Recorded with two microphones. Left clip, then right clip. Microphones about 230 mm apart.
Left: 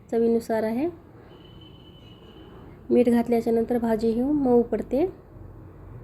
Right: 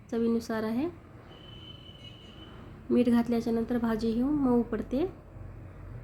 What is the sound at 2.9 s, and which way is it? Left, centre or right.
Speech, centre.